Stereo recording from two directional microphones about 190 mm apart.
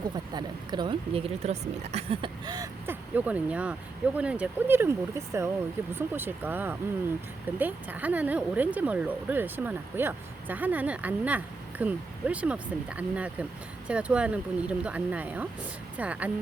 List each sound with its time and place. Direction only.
0.3 s speech: 25° right (ahead or behind); by 16.3 s 5° right (ahead or behind)